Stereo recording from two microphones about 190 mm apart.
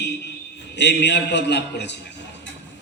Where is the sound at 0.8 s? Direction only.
65° left (ahead or behind).